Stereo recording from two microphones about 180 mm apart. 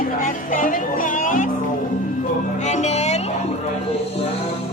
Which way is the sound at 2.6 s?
40° left (ahead or behind).